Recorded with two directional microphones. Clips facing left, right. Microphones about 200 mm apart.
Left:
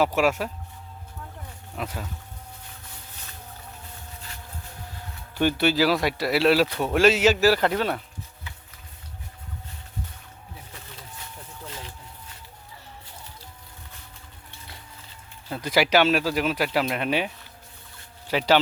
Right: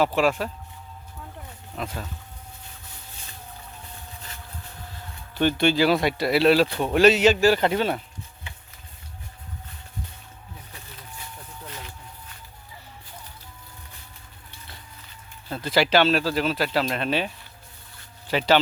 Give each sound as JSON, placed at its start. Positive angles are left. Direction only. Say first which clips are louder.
{"t": 0.0, "sound": "speech", "louder": "even", "side_deg": 10}
{"t": 1.7, "sound": "speech", "louder": "even", "side_deg": 5}
{"t": 5.3, "sound": "speech", "louder": "right 1 dB", "side_deg": 10}
{"t": 7.5, "sound": "speech", "louder": "right 1 dB", "side_deg": -25}
{"t": 11.6, "sound": "a sound", "louder": "left 1 dB", "side_deg": 30}
{"t": 15.4, "sound": "speech", "louder": "even", "side_deg": 10}